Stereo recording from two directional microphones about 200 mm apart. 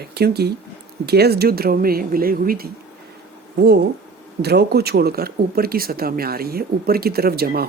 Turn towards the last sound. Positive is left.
turn(degrees=-50)  # may be behind; listen again after turning